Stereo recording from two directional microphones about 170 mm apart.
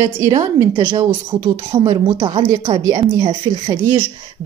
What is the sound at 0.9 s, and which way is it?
A woman's voice, 25° right (ahead or behind).